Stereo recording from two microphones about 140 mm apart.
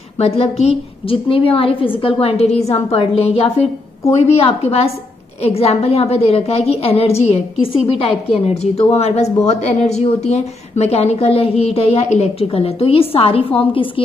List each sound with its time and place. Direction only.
0.2 s a woman's voice: 50° left (ahead or behind)